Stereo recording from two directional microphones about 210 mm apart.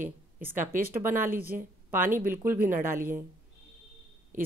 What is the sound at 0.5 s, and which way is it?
Speech, 40° right (ahead or behind).